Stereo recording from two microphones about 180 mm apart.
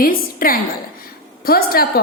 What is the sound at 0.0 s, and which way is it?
A woman's voice, 55° left (ahead or behind).